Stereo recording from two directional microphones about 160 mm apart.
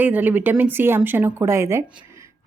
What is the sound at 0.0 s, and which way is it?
Speech, 10° right (ahead or behind).